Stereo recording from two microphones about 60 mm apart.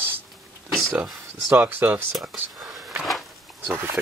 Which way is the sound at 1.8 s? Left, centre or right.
Right.